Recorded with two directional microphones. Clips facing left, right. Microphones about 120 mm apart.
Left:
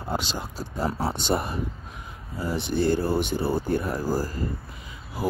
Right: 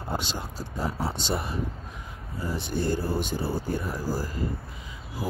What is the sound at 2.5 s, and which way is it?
Speech, 75° left (ahead or behind).